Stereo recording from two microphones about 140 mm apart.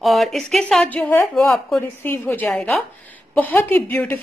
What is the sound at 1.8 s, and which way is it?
A woman's voice, 15° left (ahead or behind).